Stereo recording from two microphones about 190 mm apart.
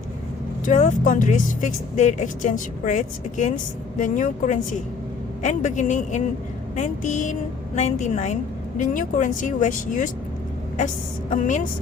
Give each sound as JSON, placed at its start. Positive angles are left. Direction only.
{"t": 0.6, "sound": "speech", "side_deg": 40}
{"t": 11.3, "sound": "speech", "side_deg": 40}